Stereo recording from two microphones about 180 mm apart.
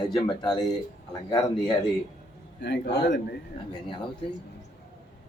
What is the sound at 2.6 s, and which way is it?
Speech, 70° left (ahead or behind).